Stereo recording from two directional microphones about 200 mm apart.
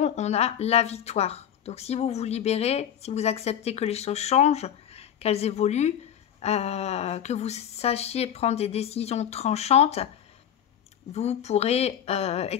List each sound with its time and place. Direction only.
0.0 s speech: 35° left (ahead or behind)
11.1 s speech: 35° left (ahead or behind)